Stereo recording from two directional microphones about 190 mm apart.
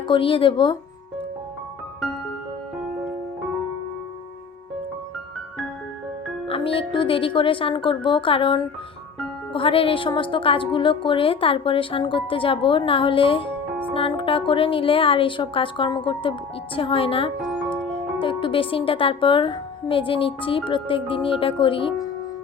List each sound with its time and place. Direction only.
0.1 s a woman's voice: 30° left (ahead or behind)
6.5 s a woman's voice: 30° left (ahead or behind)